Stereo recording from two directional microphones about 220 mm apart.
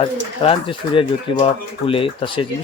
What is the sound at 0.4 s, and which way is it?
A man's voice, 25° left (ahead or behind).